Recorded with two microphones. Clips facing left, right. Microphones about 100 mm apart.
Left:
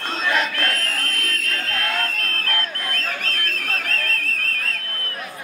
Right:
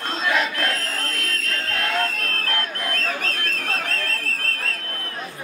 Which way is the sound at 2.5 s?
30° right (ahead or behind).